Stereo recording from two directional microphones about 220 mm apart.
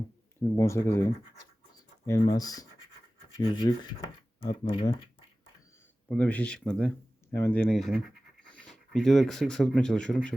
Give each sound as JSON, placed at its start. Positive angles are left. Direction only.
{"t": 0.5, "sound": "speech", "side_deg": 15}
{"t": 2.0, "sound": "speech", "side_deg": 15}
{"t": 6.1, "sound": "speech", "side_deg": 5}